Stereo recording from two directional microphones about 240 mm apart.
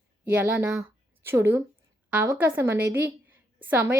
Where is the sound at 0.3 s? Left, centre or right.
Centre.